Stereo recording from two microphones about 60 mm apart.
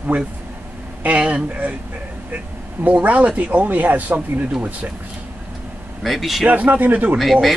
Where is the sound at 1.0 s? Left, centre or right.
Right.